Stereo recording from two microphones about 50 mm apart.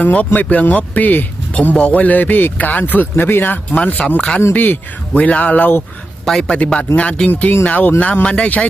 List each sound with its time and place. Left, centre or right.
0.0 s a man's voice: left
3.8 s a man's voice: left
6.3 s speech: centre
6.7 s a man's voice: left